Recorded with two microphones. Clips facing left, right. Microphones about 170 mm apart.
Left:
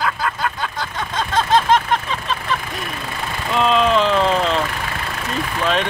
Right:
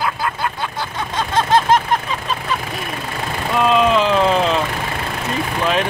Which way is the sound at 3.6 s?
5° right (ahead or behind).